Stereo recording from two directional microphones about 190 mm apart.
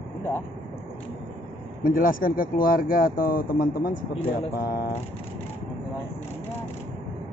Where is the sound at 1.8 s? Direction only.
45° left (ahead or behind).